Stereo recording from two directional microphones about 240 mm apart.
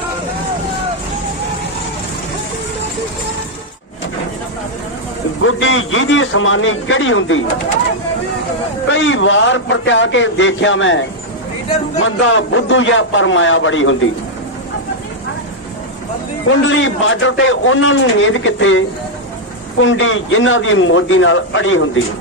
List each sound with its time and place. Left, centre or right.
5.4 s a man's voice: left
8.8 s a man's voice: left
16.4 s a man's voice: left